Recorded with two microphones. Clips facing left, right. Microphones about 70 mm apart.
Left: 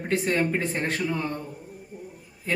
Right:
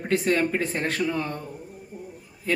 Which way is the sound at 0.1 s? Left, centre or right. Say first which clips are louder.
Right 2 dB; left.